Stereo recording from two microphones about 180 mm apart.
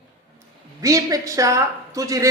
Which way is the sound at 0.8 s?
20° right (ahead or behind).